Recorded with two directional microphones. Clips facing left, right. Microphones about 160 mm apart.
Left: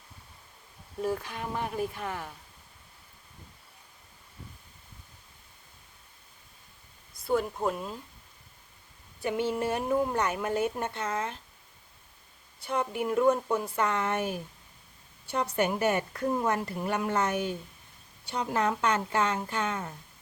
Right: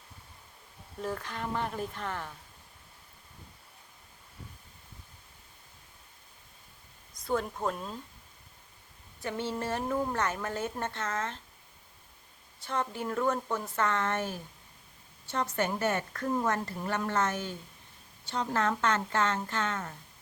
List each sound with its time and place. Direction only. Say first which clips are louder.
1.0 s a woman's voice: left 3 dB; 10° left (ahead or behind)
7.3 s a woman's voice: left 3 dB; 10° left (ahead or behind)
9.2 s a woman's voice: left 5 dB; 15° left (ahead or behind)
12.5 s a woman's voice: left 3 dB; 10° left (ahead or behind)
15.5 s a woman's voice: left 4 dB; 15° left (ahead or behind)